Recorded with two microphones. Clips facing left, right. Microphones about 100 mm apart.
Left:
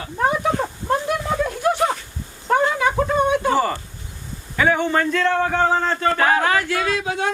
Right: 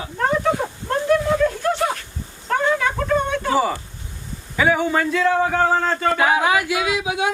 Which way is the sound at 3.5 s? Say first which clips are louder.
Even; 5° right (ahead or behind).